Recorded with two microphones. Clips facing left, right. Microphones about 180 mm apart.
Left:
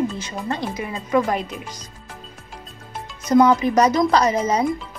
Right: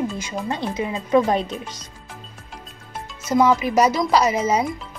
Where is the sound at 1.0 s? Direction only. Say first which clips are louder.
Right 2 dB; 30° right (ahead or behind).